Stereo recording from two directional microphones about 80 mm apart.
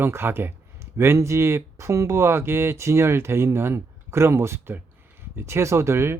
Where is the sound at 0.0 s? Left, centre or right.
Right.